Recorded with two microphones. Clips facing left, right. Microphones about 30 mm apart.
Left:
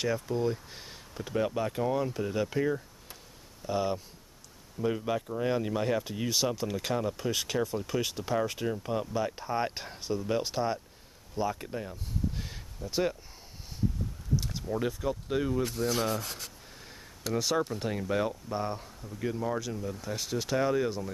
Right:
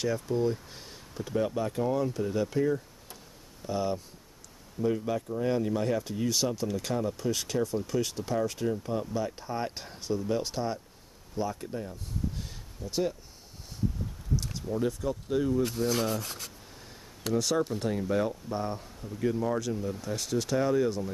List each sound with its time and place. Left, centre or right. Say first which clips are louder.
0.0 s speech: right 1 dB; centre
3.6 s speech: even; centre
14.3 s a sound: even; centre
14.9 s speech: right 1 dB; centre
15.6 s rub: right 1 dB; centre
17.3 s speech: right 2 dB; centre